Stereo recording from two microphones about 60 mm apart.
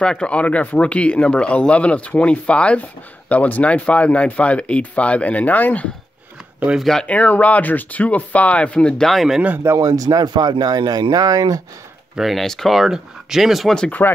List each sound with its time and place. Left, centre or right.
0.0 s speech: centre
6.8 s speech: centre
7.1 s speech: left
9.1 s speech: centre
9.8 s speech: right
12.2 s speech: centre
14.0 s speech: left